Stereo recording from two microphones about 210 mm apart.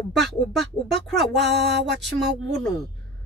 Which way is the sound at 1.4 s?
55° right (ahead or behind).